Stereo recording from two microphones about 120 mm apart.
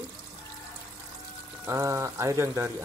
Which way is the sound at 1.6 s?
25° right (ahead or behind).